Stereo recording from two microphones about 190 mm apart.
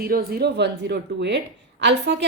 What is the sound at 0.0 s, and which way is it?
A woman's voice, 55° right (ahead or behind).